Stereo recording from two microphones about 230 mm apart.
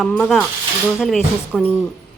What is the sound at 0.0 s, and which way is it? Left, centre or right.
A woman's voice, centre.